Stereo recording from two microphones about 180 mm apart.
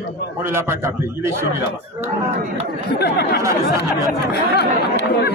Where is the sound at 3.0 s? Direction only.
60° left (ahead or behind).